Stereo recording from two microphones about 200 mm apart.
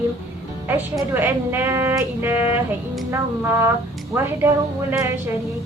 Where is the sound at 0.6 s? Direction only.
10° right (ahead or behind).